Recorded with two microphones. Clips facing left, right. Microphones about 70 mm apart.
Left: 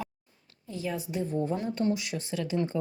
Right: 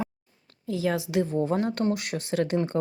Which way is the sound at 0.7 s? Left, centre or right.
Right.